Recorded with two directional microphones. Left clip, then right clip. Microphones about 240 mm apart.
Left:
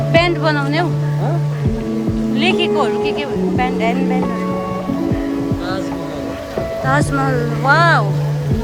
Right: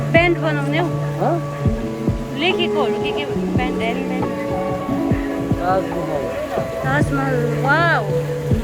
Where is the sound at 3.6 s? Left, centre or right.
Centre.